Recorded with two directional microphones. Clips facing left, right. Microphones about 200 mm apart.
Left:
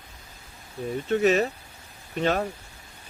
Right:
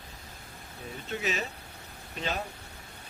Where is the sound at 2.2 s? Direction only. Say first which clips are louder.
Left 10 dB; 60° left (ahead or behind).